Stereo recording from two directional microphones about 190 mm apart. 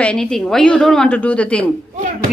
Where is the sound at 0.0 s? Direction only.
5° left (ahead or behind).